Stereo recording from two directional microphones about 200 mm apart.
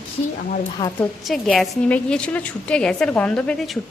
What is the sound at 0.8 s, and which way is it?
Speech, 20° left (ahead or behind).